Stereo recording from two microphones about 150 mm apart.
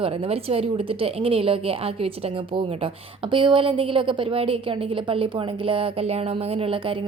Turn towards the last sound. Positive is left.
turn(degrees=-35)  # may be behind; listen again after turning